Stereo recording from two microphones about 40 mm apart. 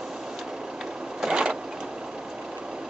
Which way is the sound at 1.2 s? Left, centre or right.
Centre.